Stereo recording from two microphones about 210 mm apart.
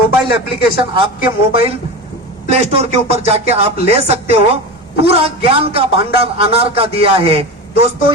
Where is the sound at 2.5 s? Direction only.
30° right (ahead or behind).